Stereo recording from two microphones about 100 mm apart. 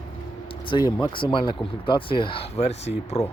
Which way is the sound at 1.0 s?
60° left (ahead or behind).